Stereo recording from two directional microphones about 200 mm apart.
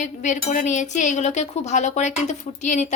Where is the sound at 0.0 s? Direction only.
35° left (ahead or behind).